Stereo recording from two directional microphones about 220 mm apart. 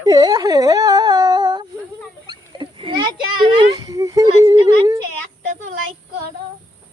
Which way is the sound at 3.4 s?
20° right (ahead or behind).